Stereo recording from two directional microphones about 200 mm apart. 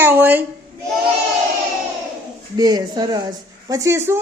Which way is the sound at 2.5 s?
20° right (ahead or behind).